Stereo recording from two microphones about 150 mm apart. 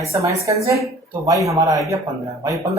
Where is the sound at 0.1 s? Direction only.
20° right (ahead or behind).